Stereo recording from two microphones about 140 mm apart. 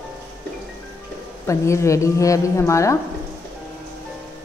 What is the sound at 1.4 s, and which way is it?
Speech, 20° left (ahead or behind).